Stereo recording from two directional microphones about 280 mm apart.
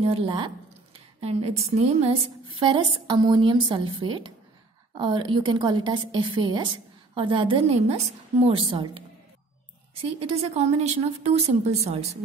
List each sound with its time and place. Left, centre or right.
0.0 s a woman's voice: centre
10.3 s a woman's voice: right